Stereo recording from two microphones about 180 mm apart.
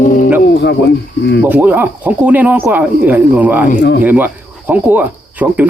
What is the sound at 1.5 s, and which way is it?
Speech, 10° right (ahead or behind).